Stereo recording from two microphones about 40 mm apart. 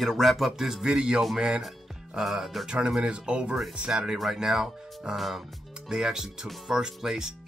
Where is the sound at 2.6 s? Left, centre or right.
Centre.